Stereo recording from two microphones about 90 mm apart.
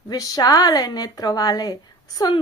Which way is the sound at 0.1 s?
45° left (ahead or behind).